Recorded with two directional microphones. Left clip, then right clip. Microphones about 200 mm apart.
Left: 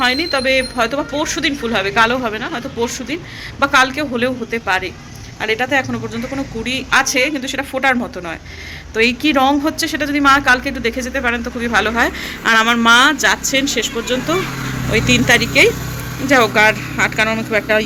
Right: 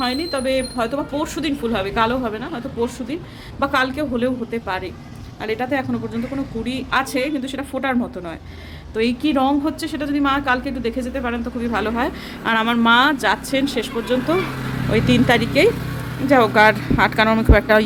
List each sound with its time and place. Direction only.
0.0 s speech: 5° left (ahead or behind)
9.0 s speech: centre (ahead or behind); by 17.8 s 20° right (ahead or behind)